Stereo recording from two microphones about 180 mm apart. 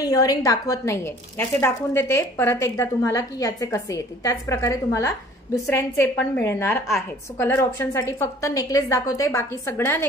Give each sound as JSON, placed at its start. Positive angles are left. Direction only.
{"t": 0.0, "sound": "a woman's voice", "side_deg": 20}